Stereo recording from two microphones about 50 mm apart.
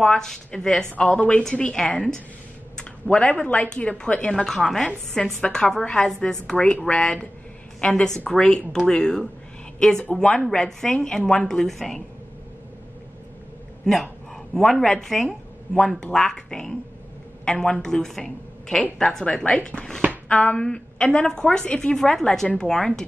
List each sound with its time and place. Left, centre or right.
0.0 s a woman's voice: centre
4.5 s a woman's voice: centre
6.5 s a woman's voice: left
14.3 s a woman's voice: centre